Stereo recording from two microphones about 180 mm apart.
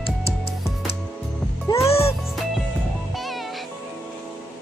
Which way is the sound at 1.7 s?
25° left (ahead or behind).